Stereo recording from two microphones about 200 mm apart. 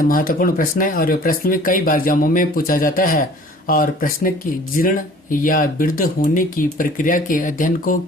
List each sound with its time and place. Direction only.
0.0 s speech: 45° left (ahead or behind)